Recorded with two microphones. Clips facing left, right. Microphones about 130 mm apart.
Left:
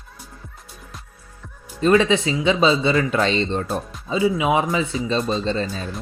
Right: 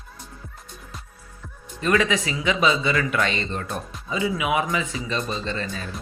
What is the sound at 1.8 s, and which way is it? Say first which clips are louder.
A man's voice: left 5 dB; 30° left (ahead or behind).